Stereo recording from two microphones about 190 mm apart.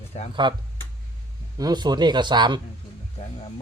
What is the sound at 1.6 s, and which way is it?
Speech, 20° right (ahead or behind).